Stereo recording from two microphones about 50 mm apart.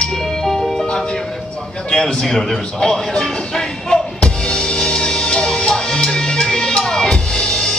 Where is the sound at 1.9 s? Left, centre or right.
Centre.